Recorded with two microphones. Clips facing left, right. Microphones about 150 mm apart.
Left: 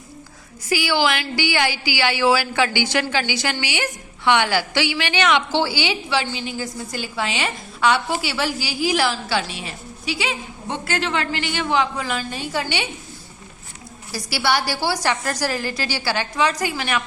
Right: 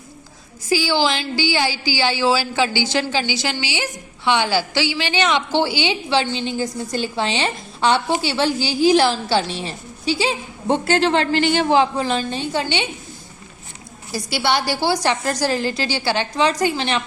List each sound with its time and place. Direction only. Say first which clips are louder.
0.7 s a woman's voice: right 1 dB; 15° left (ahead or behind)
3.0 s a woman's voice: right 1 dB; 20° right (ahead or behind)
4.8 s a woman's voice: right 1 dB; 15° left (ahead or behind)
5.2 s a woman's voice: even; 20° right (ahead or behind)
14.1 s a woman's voice: right 1 dB; 20° right (ahead or behind)